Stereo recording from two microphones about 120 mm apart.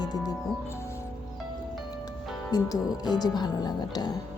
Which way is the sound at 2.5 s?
35° left (ahead or behind).